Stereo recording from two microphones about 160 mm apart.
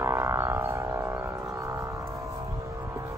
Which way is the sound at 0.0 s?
15° right (ahead or behind).